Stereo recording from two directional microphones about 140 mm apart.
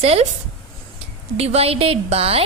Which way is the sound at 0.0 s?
45° right (ahead or behind).